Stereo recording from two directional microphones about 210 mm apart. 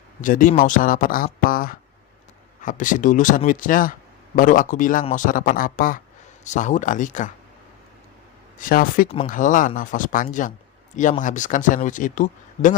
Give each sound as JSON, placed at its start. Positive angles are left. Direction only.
{"t": 0.2, "sound": "speech", "side_deg": 40}
{"t": 8.5, "sound": "speech", "side_deg": 40}